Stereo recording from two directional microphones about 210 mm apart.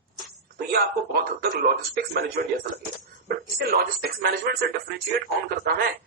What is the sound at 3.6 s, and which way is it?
Speech, 45° right (ahead or behind).